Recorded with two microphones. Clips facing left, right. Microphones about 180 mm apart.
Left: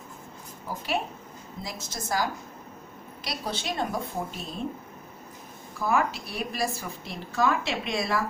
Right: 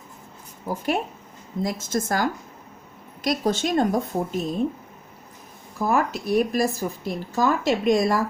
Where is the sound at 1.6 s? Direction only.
50° right (ahead or behind).